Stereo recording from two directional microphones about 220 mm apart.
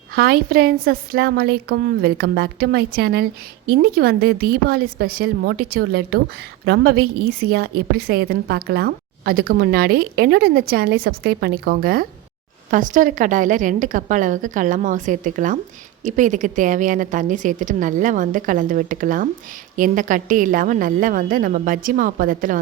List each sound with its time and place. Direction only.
0.1 s a woman's voice: 45° right (ahead or behind)